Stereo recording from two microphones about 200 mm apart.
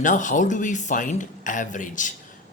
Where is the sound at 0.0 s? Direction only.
40° left (ahead or behind).